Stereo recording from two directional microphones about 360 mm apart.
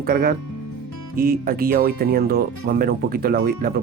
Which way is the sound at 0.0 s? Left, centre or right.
Right.